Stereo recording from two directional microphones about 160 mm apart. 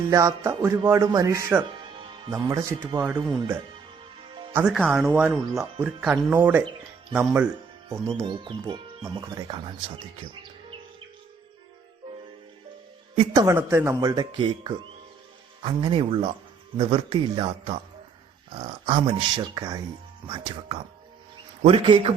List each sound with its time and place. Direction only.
0.1 s speech: 20° right (ahead or behind)
3.0 s speech: 5° right (ahead or behind)
4.5 s speech: 5° right (ahead or behind)
8.2 s speech: 30° right (ahead or behind)
13.3 s speech: 20° right (ahead or behind)
14.2 s speech: 30° right (ahead or behind)